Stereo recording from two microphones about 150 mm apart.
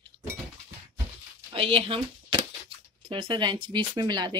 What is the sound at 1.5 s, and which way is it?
Speech, 40° right (ahead or behind).